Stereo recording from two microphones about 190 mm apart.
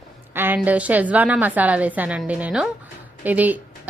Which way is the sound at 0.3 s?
10° right (ahead or behind).